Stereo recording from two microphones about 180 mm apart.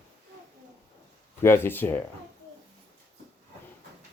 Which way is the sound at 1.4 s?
10° left (ahead or behind).